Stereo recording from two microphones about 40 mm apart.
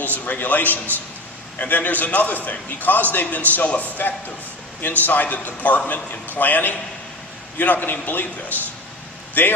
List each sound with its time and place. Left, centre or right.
0.0 s a man's voice: left
6.3 s a man's voice: left